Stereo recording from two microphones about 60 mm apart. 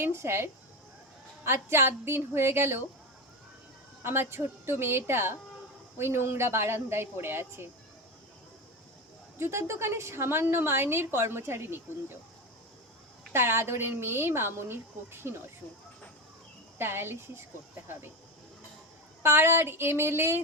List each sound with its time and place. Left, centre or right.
0.0 s a woman's voice: right
4.0 s a woman's voice: right
9.4 s a woman's voice: right
13.3 s a woman's voice: right
16.7 s a woman's voice: right
19.2 s a woman's voice: right